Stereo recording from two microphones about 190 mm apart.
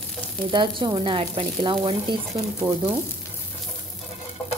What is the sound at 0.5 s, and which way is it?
A woman's voice, 25° right (ahead or behind).